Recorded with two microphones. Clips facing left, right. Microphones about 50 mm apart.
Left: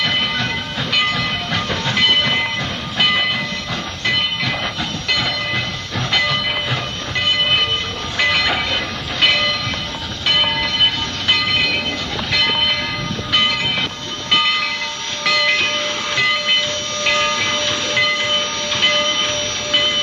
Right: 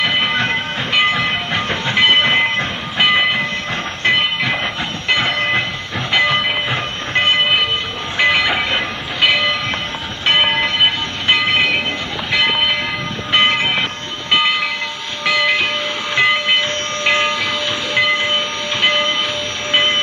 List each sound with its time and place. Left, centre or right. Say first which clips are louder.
0.0 s train: right 3 dB; right
10.2 s train: right 3 dB; right
13.3 s train: right 4 dB; right
14.3 s train: right 1 dB; centre
16.2 s steam: right 3 dB; right
17.4 s train: even; centre
19.7 s train: right 3 dB; right